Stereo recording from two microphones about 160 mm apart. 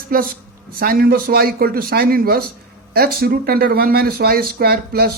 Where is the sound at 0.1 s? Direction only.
65° right (ahead or behind).